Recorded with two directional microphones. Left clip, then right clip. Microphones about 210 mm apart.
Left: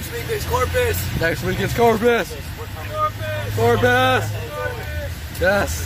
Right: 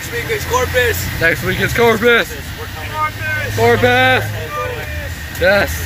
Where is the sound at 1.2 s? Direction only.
5° left (ahead or behind).